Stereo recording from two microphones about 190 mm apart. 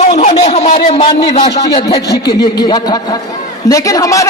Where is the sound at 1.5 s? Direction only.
20° left (ahead or behind).